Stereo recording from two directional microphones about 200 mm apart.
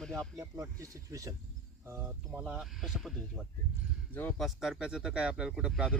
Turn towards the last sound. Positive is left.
turn(degrees=-5)  # may be behind; listen again after turning